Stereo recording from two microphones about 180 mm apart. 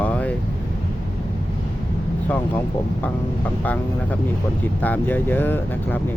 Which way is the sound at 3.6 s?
10° left (ahead or behind).